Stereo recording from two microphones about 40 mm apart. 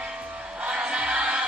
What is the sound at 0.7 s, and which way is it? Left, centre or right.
Music, right.